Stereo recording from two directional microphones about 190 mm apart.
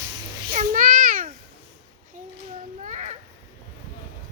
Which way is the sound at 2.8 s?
40° right (ahead or behind).